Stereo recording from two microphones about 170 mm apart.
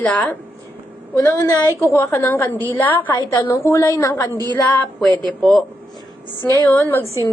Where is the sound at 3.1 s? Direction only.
25° left (ahead or behind); by 5.6 s centre (ahead or behind).